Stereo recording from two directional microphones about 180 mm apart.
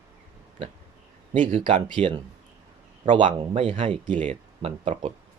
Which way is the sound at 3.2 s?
40° right (ahead or behind).